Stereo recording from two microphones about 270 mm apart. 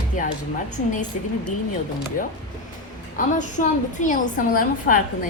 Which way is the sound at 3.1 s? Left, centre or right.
Left.